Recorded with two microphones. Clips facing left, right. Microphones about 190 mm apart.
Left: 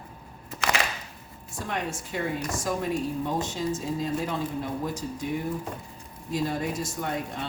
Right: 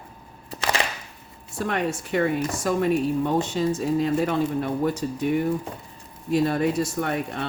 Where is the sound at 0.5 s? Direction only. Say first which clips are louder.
Right 2 dB; 35° right (ahead or behind).